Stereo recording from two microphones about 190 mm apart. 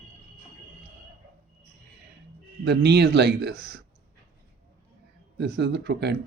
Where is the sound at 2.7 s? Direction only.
60° right (ahead or behind).